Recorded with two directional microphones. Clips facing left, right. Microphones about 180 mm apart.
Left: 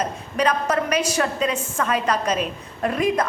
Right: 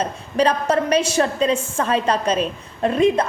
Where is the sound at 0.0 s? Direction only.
30° right (ahead or behind).